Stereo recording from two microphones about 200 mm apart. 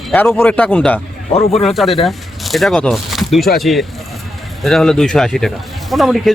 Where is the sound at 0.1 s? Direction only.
10° left (ahead or behind).